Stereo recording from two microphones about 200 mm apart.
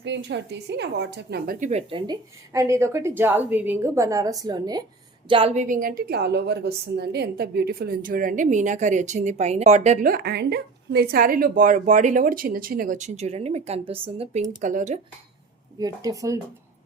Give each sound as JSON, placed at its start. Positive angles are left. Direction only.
{"t": 0.0, "sound": "a woman's voice", "side_deg": -60}
{"t": 1.9, "sound": "a woman's voice", "side_deg": -25}
{"t": 14.6, "sound": "speech", "side_deg": -40}
{"t": 15.8, "sound": "a woman's voice", "side_deg": -20}